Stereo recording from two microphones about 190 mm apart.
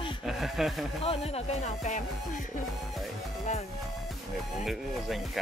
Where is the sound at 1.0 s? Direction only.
30° left (ahead or behind).